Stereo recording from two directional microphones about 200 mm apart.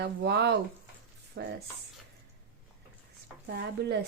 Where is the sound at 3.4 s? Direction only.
55° right (ahead or behind).